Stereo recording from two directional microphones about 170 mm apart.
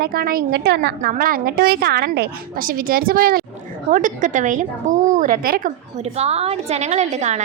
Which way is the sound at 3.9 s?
50° right (ahead or behind).